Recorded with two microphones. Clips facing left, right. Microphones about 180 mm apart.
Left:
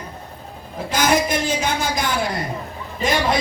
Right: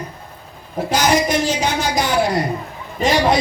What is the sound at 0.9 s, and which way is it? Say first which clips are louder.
Speech: right 2 dB; 50° left (ahead or behind).